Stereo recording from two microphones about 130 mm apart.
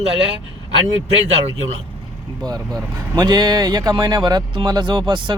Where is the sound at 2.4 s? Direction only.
30° right (ahead or behind).